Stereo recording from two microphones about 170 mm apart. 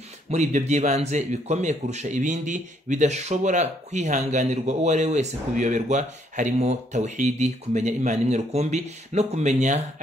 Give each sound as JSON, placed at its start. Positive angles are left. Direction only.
{"t": 0.3, "sound": "speech", "side_deg": -45}